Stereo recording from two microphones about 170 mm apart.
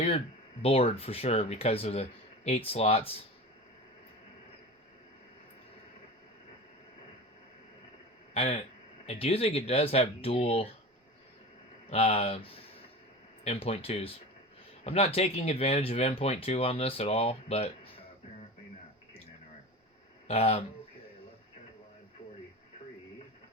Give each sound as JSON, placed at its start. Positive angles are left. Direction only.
{"t": 0.6, "sound": "speech", "side_deg": 35}
{"t": 8.3, "sound": "a man's voice", "side_deg": 35}
{"t": 11.9, "sound": "speech", "side_deg": 35}
{"t": 20.3, "sound": "speech", "side_deg": 40}